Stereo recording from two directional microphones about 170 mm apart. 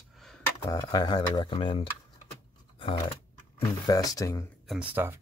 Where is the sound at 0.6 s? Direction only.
25° left (ahead or behind).